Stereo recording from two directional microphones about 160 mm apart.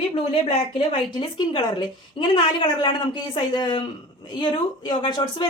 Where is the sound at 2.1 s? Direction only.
30° left (ahead or behind).